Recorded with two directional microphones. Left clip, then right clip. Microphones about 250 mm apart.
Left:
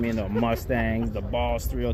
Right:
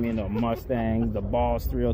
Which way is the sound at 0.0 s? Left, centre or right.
Centre.